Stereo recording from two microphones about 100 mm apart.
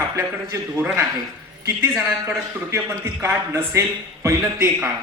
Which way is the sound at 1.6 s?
30° right (ahead or behind).